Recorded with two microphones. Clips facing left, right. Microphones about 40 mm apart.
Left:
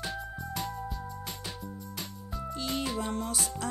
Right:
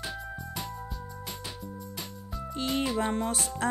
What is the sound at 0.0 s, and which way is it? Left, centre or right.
Music, centre.